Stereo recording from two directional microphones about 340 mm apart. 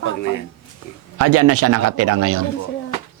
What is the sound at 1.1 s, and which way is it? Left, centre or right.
A man's voice, right.